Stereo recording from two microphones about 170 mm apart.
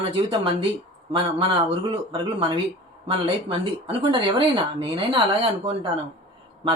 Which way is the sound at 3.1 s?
35° right (ahead or behind).